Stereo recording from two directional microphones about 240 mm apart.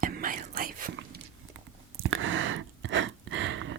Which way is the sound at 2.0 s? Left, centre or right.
Right.